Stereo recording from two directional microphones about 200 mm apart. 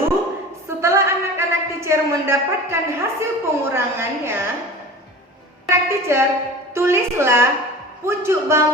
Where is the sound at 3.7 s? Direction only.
10° right (ahead or behind).